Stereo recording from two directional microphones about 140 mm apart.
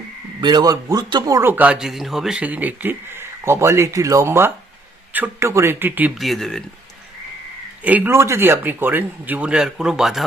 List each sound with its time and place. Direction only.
0.4 s a man's voice: 30° right (ahead or behind); by 6.1 s 15° right (ahead or behind)
6.1 s speech: centre (ahead or behind)
7.9 s a man's voice: 15° right (ahead or behind)